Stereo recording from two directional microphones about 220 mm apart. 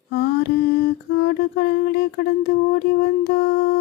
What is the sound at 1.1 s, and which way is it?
Mantra, 45° left (ahead or behind).